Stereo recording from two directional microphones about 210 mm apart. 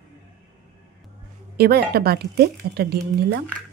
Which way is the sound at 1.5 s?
50° right (ahead or behind).